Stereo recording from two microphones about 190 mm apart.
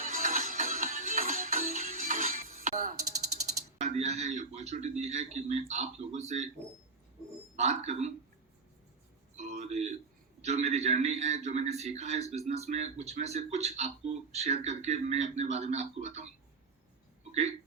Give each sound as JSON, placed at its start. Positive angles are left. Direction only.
{"t": 0.1, "sound": "music", "side_deg": -45}
{"t": 3.8, "sound": "a man's voice", "side_deg": -35}
{"t": 7.5, "sound": "a man's voice", "side_deg": -35}
{"t": 9.4, "sound": "a sound", "side_deg": -35}
{"t": 10.4, "sound": "a man's voice", "side_deg": -35}